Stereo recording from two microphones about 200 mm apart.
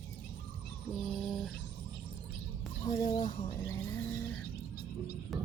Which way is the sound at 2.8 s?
20° left (ahead or behind).